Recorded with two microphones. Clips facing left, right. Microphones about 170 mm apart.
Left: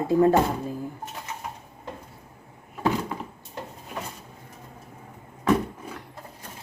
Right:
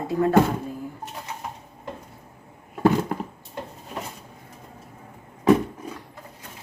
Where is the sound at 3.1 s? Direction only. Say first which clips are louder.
Right 5 dB; 55° right (ahead or behind).